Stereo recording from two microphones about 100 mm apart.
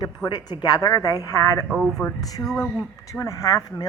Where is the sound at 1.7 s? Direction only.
5° right (ahead or behind).